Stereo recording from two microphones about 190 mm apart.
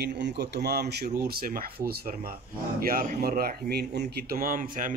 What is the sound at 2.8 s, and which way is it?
Speech, 50° right (ahead or behind).